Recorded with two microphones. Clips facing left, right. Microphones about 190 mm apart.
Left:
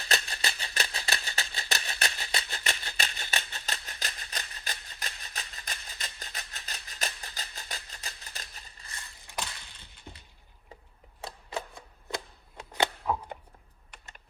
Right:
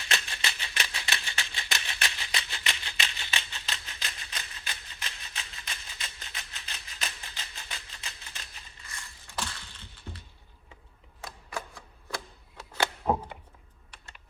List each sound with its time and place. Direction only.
0.0 s scissors: 35° left (ahead or behind)
9.0 s crushing: 15° left (ahead or behind)
10.1 s a sound: 20° left (ahead or behind)